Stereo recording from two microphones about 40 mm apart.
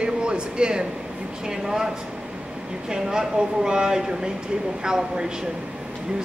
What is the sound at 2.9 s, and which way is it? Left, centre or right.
Speech, centre.